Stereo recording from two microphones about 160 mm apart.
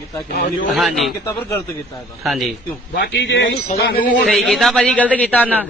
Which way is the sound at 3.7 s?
70° left (ahead or behind).